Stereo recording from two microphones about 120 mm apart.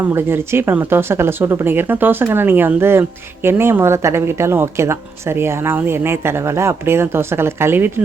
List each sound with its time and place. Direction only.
0.0 s speech: 20° right (ahead or behind)